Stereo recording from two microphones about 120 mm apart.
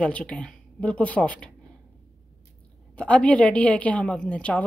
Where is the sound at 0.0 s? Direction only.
10° left (ahead or behind).